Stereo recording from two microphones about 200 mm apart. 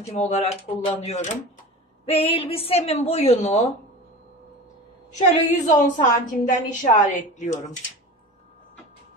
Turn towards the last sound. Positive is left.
turn(degrees=40)  # may be behind; listen again after turning